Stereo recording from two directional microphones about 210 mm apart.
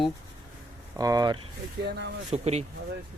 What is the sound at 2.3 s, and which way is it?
Speech, 30° right (ahead or behind).